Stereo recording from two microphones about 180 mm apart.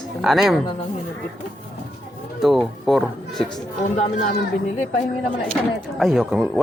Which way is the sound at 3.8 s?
40° left (ahead or behind).